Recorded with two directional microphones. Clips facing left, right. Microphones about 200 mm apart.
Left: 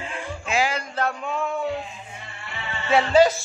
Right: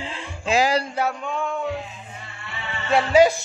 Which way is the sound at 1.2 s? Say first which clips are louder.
Even; 5° left (ahead or behind).